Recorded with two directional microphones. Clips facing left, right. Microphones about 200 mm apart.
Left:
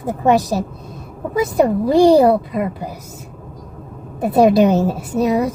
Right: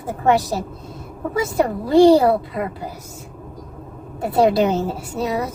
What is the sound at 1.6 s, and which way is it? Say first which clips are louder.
A woman's voice: left 1 dB; 15° left (ahead or behind).